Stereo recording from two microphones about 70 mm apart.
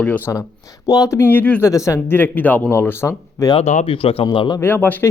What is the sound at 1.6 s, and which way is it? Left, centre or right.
Speech, left.